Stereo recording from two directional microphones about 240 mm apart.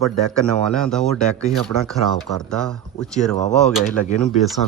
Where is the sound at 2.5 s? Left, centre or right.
Centre.